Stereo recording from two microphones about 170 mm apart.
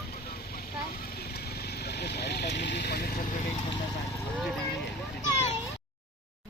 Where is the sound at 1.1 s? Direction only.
65° left (ahead or behind).